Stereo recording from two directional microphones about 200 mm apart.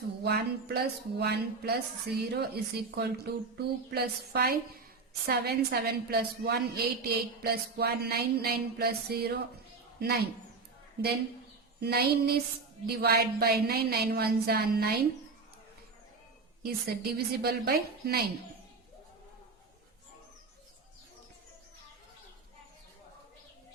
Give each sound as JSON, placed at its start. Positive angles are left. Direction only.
{"t": 0.2, "sound": "music", "side_deg": -55}
{"t": 2.3, "sound": "a woman's voice", "side_deg": -55}
{"t": 11.8, "sound": "a woman's voice", "side_deg": -50}
{"t": 16.6, "sound": "a woman's voice", "side_deg": -50}